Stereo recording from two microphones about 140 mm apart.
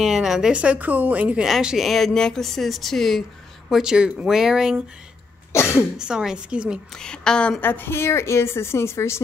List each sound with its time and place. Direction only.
0.0 s speech: 5° right (ahead or behind)
5.5 s cough: 20° left (ahead or behind)
5.9 s a woman's voice: 5° right (ahead or behind)
7.0 s a woman's voice: 5° left (ahead or behind)